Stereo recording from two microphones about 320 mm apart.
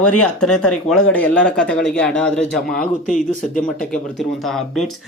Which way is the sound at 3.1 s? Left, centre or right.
Left.